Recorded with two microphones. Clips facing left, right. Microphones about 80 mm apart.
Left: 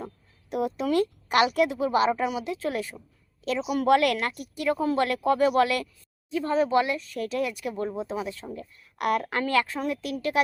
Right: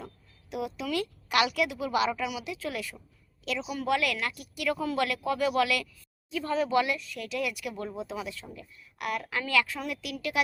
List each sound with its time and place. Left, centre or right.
0.5 s speech: left
3.8 s a woman's voice: left
4.3 s speech: left